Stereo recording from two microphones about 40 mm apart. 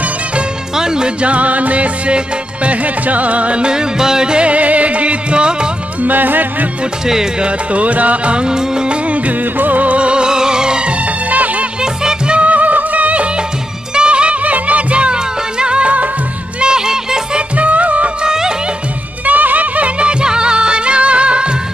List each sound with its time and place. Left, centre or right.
0.7 s music: centre
1.2 s music: right
6.0 s music: right
7.3 s music: right
11.8 s music: centre
12.4 s music: right
16.5 s music: right
17.4 s music: right
18.2 s music: centre
19.2 s music: right